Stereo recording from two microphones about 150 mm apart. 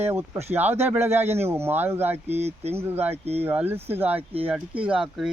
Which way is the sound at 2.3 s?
45° right (ahead or behind).